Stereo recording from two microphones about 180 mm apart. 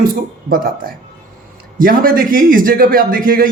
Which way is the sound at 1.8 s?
50° right (ahead or behind).